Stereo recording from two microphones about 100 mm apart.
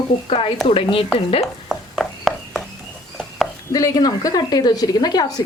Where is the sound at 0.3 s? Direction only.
65° left (ahead or behind).